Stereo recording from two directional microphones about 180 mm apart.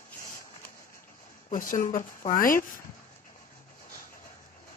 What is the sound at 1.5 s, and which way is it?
Speech, 45° left (ahead or behind).